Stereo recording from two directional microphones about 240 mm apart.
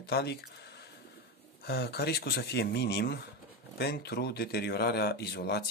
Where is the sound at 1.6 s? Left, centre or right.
Left.